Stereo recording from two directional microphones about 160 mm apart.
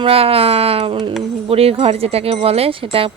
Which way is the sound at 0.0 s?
35° right (ahead or behind).